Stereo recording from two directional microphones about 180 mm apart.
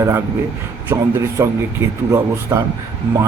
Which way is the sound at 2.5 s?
15° right (ahead or behind).